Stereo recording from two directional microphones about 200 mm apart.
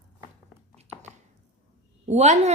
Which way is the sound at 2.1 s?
35° right (ahead or behind).